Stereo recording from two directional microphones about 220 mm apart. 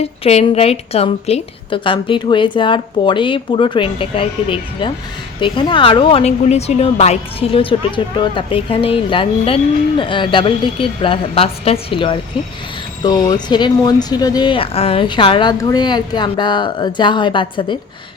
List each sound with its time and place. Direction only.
0.0 s a woman's voice: 30° left (ahead or behind)